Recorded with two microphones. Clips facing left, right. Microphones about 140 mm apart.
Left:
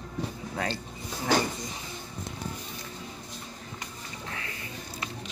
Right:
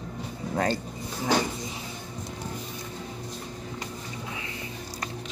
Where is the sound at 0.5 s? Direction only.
45° right (ahead or behind).